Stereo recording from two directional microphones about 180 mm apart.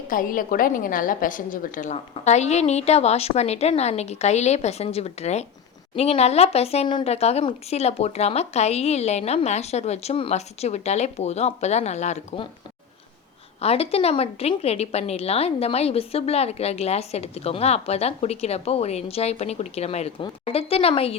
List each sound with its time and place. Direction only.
0.1 s a woman's voice: 50° left (ahead or behind)
13.6 s a woman's voice: 35° left (ahead or behind)